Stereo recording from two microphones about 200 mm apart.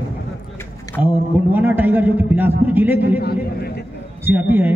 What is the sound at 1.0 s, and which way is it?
A man's voice, 10° right (ahead or behind).